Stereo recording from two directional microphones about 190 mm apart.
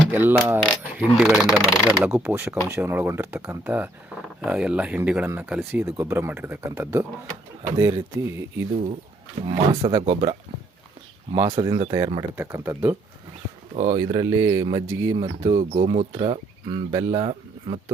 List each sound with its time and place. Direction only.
0.1 s mechanisms: 10° right (ahead or behind)
0.4 s speech: 5° right (ahead or behind)
1.3 s speech: 15° left (ahead or behind)
1.5 s speech: centre (ahead or behind)
9.5 s speech: 25° right (ahead or behind)
13.7 s speech: 25° right (ahead or behind)
15.2 s speech: 30° right (ahead or behind)